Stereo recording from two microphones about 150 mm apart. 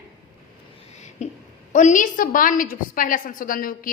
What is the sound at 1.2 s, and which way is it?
Speech, 45° left (ahead or behind).